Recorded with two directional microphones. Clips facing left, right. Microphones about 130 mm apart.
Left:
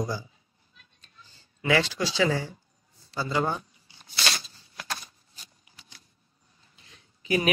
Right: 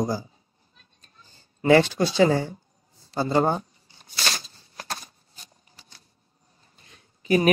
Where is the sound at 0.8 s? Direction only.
40° right (ahead or behind).